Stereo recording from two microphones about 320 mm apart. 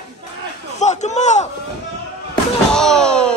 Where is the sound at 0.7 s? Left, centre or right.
Left.